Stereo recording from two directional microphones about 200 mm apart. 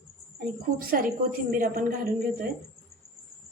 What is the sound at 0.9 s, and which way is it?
Speech, 45° right (ahead or behind).